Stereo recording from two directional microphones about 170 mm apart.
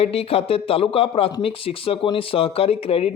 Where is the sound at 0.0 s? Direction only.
35° left (ahead or behind).